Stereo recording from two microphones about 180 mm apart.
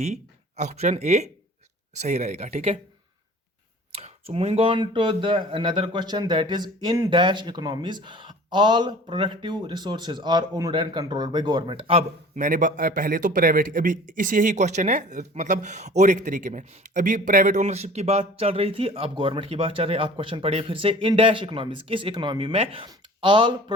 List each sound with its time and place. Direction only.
0.0 s a man's voice: 40° right (ahead or behind)
3.9 s speech: 35° right (ahead or behind)
12.4 s a man's voice: 45° right (ahead or behind); by 23.7 s 25° right (ahead or behind)